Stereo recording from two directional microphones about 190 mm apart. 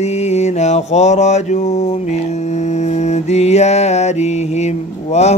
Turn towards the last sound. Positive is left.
turn(degrees=35)  # may be behind; listen again after turning